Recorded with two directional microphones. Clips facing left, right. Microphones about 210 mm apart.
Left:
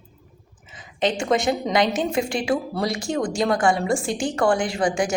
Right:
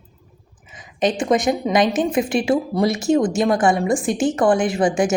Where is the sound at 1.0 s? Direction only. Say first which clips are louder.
Right 3 dB; 20° right (ahead or behind).